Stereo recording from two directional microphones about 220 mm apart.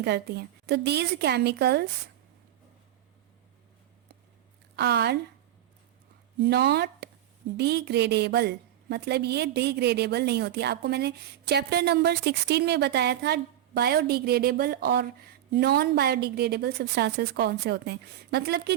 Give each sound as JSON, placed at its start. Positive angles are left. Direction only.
{"t": 0.0, "sound": "a woman's voice", "side_deg": -50}
{"t": 4.8, "sound": "a woman's voice", "side_deg": -50}
{"t": 6.4, "sound": "a woman's voice", "side_deg": -50}